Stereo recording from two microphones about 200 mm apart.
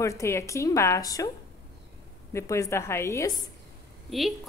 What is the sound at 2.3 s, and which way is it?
A woman's voice, 15° left (ahead or behind).